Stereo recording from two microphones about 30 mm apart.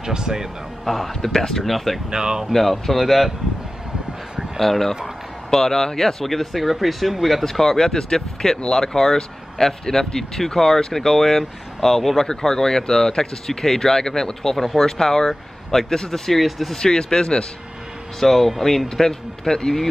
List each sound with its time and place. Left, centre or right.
0.0 s speech: right
0.8 s speech: centre
2.0 s speech: right
2.5 s speech: centre
4.6 s speech: centre
6.2 s speech: centre
7.4 s speech: centre
16.7 s speech: left
18.2 s speech: centre